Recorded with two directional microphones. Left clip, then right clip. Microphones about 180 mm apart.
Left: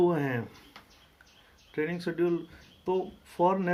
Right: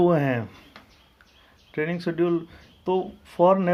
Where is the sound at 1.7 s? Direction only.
35° right (ahead or behind).